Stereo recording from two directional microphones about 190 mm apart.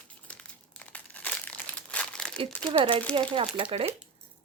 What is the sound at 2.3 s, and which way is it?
Speech, 30° right (ahead or behind).